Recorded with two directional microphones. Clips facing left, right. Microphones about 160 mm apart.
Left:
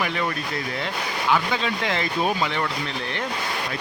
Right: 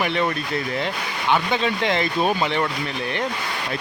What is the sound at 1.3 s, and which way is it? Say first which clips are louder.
Speech: right 3 dB; 20° right (ahead or behind).